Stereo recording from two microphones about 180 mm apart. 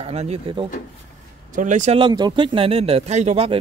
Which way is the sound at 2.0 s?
25° right (ahead or behind).